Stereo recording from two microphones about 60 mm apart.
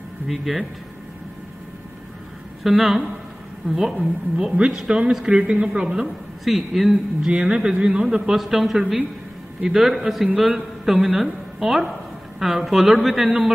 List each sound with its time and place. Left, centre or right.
0.3 s a man's voice: centre
2.6 s a man's voice: centre
6.0 s a man's voice: centre
7.2 s a man's voice: centre